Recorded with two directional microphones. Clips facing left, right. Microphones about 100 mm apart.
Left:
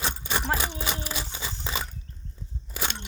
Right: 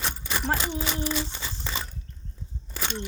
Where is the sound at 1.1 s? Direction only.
10° left (ahead or behind).